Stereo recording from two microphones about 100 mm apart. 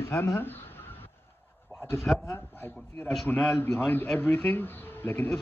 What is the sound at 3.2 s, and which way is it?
A man's voice, 15° left (ahead or behind).